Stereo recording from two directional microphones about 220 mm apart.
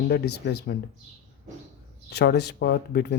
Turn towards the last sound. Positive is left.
turn(degrees=45)  # may be behind; listen again after turning